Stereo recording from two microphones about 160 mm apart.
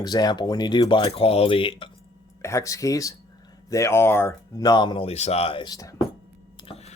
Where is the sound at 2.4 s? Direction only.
20° left (ahead or behind).